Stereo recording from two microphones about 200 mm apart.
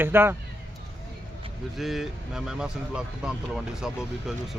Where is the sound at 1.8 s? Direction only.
Centre (ahead or behind).